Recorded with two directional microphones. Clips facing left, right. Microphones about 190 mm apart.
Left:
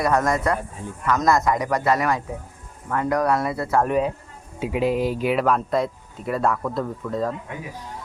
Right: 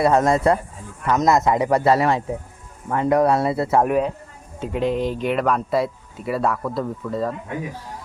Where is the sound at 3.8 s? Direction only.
Centre (ahead or behind).